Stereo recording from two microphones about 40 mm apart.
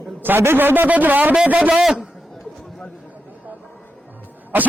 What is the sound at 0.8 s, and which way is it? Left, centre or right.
Speech, right.